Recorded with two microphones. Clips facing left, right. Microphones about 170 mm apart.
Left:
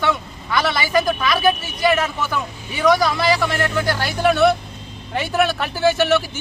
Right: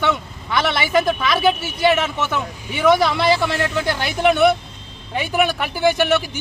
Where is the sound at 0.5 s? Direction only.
25° right (ahead or behind).